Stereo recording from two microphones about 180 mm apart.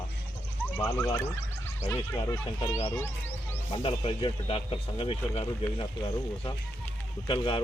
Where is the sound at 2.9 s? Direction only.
10° left (ahead or behind).